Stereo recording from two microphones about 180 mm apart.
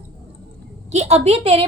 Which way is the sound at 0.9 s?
35° right (ahead or behind).